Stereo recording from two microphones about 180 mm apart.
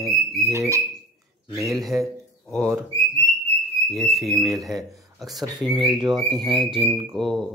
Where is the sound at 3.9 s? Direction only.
Centre (ahead or behind).